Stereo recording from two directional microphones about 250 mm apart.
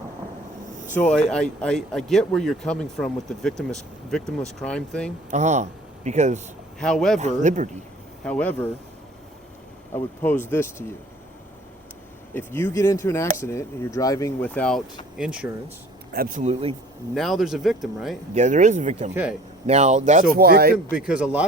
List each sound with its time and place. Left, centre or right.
0.9 s speech: centre
5.3 s a man's voice: right
6.7 s speech: centre
7.2 s speech: right
8.2 s speech: centre
9.9 s speech: centre
12.3 s speech: centre
16.1 s speech: right
17.2 s speech: centre
18.3 s speech: right
20.3 s speech: right
20.9 s speech: centre